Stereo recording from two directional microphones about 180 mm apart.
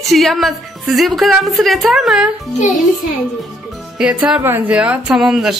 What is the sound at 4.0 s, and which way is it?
A woman's voice, 5° right (ahead or behind).